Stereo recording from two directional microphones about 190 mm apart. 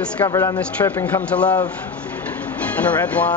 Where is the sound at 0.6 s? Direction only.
10° left (ahead or behind).